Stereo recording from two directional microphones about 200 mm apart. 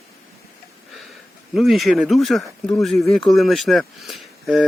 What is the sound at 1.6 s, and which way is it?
Speech, centre (ahead or behind).